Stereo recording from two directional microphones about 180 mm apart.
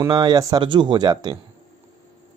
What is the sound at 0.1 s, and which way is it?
Speech, 25° right (ahead or behind).